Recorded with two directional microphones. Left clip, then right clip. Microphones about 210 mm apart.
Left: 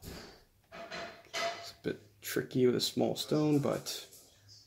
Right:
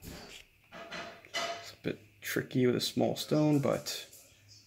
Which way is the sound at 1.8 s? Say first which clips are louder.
Right 2 dB; 40° right (ahead or behind).